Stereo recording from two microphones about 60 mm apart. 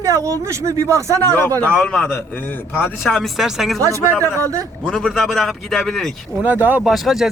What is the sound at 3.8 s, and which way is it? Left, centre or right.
Speech, right.